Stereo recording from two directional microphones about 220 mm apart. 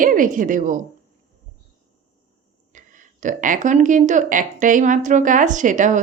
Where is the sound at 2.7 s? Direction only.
35° right (ahead or behind).